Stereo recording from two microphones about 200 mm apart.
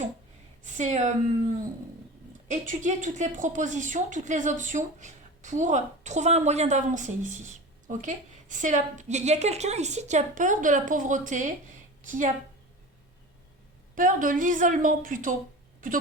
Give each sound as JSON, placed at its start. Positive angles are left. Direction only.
{"t": 0.6, "sound": "speech", "side_deg": -35}
{"t": 2.5, "sound": "speech", "side_deg": -40}
{"t": 13.9, "sound": "speech", "side_deg": -45}